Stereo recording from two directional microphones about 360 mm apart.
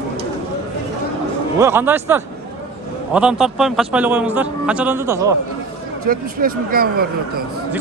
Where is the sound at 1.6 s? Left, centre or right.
Centre.